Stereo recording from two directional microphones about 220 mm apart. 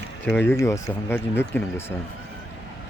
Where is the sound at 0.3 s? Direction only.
10° left (ahead or behind).